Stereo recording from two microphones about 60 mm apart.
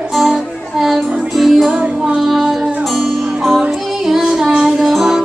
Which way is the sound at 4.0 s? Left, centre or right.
Centre.